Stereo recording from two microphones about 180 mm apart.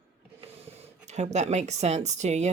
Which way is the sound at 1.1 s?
40° right (ahead or behind).